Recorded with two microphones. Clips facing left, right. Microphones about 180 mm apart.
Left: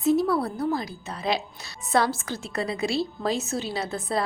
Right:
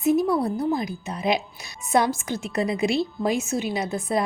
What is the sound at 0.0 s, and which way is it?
A woman's voice, 15° right (ahead or behind).